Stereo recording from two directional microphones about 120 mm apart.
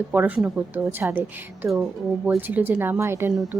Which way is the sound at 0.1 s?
15° right (ahead or behind).